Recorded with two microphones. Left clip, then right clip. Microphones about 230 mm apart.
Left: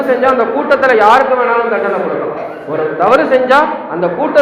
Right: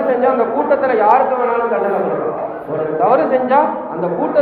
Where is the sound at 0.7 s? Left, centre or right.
Left.